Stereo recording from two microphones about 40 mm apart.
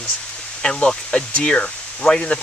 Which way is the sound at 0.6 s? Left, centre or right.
Centre.